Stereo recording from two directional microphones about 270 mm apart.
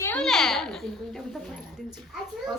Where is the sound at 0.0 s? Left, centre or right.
Centre.